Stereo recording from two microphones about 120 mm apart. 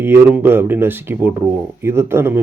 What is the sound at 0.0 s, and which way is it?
Speech, 15° right (ahead or behind).